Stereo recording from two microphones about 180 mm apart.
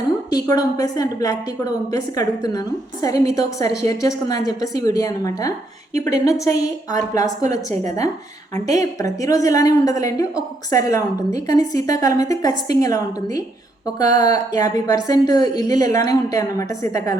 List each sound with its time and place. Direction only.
0.3 s a woman's voice: 20° left (ahead or behind)
8.5 s a woman's voice: 20° left (ahead or behind)